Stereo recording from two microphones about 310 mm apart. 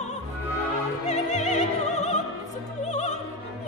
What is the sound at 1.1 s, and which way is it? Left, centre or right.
Music, left.